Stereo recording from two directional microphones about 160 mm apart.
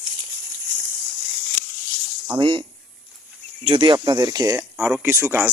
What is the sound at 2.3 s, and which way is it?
Speech, 30° right (ahead or behind).